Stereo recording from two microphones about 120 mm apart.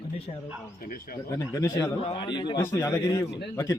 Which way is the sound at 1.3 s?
25° left (ahead or behind).